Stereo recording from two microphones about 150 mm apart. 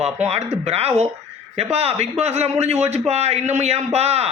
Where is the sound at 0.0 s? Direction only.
45° right (ahead or behind).